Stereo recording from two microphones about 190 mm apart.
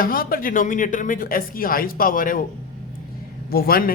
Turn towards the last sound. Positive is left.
turn(degrees=50)  # may be behind; listen again after turning